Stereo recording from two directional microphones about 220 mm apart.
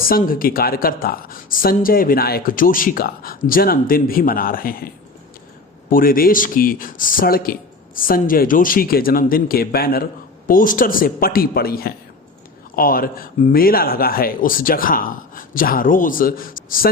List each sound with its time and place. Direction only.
0.1 s speech: 40° left (ahead or behind)
5.9 s speech: 40° left (ahead or behind)